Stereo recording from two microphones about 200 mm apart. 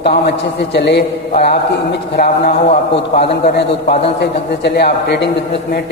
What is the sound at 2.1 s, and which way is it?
Speech, 50° left (ahead or behind).